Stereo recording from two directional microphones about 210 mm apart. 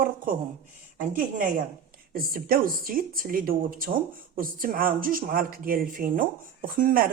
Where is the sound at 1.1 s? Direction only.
40° right (ahead or behind).